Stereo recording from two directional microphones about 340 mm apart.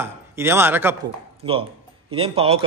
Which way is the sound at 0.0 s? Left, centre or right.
Centre.